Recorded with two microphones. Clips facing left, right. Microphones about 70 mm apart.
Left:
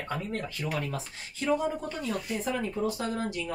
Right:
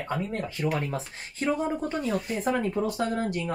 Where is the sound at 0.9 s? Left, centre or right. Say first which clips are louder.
Right 3 dB; right.